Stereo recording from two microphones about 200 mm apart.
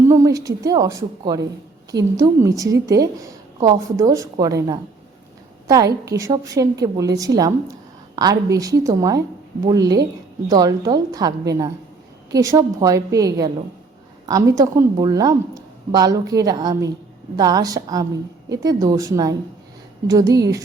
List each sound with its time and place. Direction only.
0.1 s a woman's voice: 15° right (ahead or behind)